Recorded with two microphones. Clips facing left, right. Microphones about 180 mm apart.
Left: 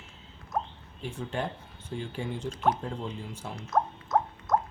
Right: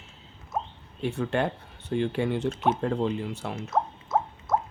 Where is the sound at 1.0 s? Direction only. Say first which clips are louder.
Right 7 dB; 70° right (ahead or behind).